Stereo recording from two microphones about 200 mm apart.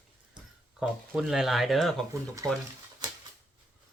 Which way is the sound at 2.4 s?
15° right (ahead or behind).